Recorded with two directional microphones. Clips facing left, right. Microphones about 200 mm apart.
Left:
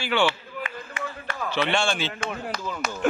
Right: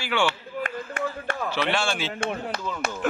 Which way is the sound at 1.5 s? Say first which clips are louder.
Left 3 dB; 5° right (ahead or behind).